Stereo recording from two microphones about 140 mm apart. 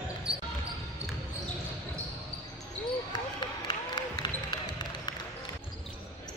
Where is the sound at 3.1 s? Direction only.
30° left (ahead or behind).